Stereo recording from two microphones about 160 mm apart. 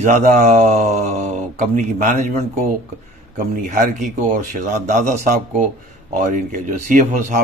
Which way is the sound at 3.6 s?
55° right (ahead or behind).